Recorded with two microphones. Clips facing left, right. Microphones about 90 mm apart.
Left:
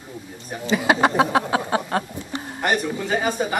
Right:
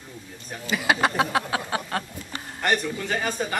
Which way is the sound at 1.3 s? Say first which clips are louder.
Left 5 dB; 25° left (ahead or behind).